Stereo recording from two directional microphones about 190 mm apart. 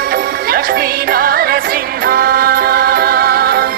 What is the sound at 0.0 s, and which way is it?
Music, 50° right (ahead or behind).